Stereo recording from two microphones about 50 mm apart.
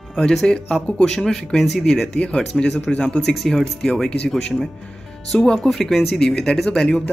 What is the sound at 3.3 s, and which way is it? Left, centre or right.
Speech, centre.